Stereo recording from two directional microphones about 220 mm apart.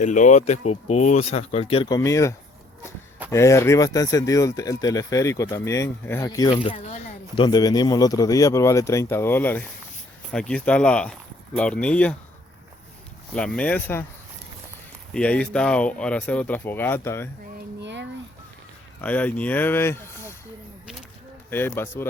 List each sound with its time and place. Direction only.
0.0 s speech: 35° left (ahead or behind); by 12.1 s 5° left (ahead or behind)
13.3 s speech: 5° left (ahead or behind)
15.1 s speech: 5° left (ahead or behind)
17.7 s a sound: 55° right (ahead or behind)
19.0 s speech: 5° left (ahead or behind)
21.5 s speech: 10° left (ahead or behind)